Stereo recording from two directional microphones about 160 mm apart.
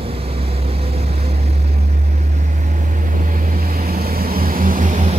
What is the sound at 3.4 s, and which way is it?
Vehicle, 70° right (ahead or behind).